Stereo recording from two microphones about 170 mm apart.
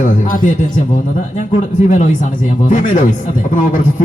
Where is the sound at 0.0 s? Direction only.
50° left (ahead or behind).